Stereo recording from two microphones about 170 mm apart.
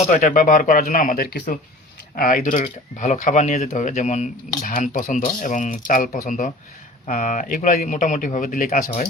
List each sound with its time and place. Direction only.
0.0 s speech: 50° left (ahead or behind)